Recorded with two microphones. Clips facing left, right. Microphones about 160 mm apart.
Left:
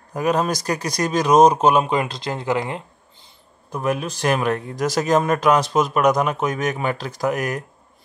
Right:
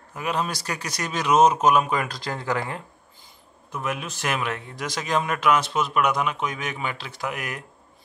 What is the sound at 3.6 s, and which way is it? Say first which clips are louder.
Speech: left 7 dB; 35° left (ahead or behind).